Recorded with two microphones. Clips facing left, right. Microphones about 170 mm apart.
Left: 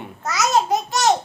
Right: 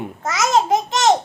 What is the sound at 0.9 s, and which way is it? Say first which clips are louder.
Laughter: right 2 dB; 20° right (ahead or behind).